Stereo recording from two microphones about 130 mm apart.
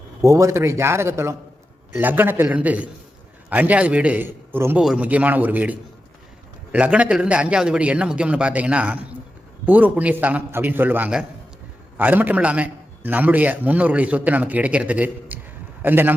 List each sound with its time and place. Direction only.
0.2 s a man's voice: 25° right (ahead or behind)